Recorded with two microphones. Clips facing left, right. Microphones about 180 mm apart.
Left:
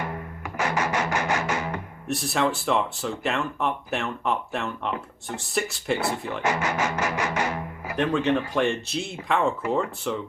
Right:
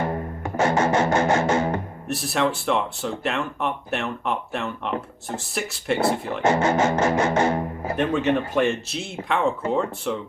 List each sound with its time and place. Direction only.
0.0 s music: 35° right (ahead or behind)
2.0 s speech: centre (ahead or behind)
6.4 s speech: 25° right (ahead or behind)
7.9 s speech: 5° right (ahead or behind)